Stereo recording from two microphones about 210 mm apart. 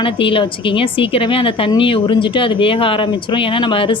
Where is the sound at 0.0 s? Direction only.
25° left (ahead or behind).